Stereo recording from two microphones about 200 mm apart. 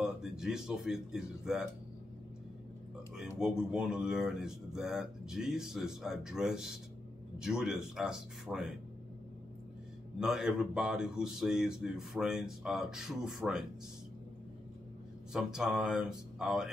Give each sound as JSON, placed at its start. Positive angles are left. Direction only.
{"t": 0.0, "sound": "a man's voice", "side_deg": -5}
{"t": 3.2, "sound": "speech", "side_deg": -5}
{"t": 10.1, "sound": "speech", "side_deg": -5}
{"t": 15.3, "sound": "speech", "side_deg": 0}